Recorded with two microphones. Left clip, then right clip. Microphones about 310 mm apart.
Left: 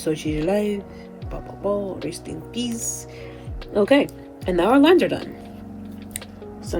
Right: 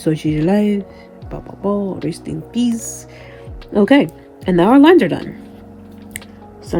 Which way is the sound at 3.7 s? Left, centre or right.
Right.